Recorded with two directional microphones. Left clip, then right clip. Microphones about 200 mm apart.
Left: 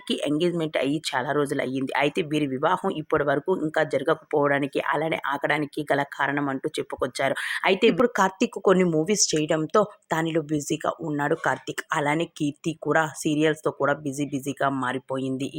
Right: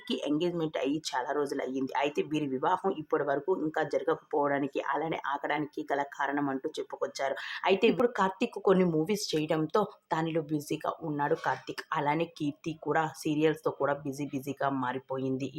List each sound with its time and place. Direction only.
0.1 s speech: 20° left (ahead or behind)